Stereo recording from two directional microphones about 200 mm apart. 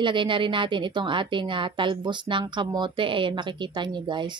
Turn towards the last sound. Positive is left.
turn(degrees=-20)  # may be behind; listen again after turning